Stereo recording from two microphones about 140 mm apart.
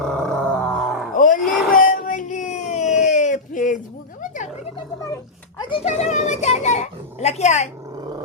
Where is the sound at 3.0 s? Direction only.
60° left (ahead or behind).